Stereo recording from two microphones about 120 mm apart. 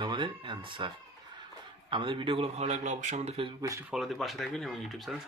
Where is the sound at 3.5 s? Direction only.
25° right (ahead or behind).